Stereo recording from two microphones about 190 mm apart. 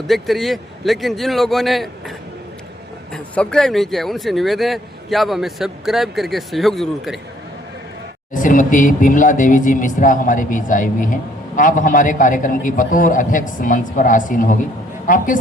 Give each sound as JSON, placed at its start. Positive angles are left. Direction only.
{"t": 0.1, "sound": "speech", "side_deg": 0}
{"t": 8.3, "sound": "speech", "side_deg": 45}